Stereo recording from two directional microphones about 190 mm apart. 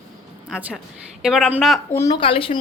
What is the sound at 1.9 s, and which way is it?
Speech, 15° left (ahead or behind).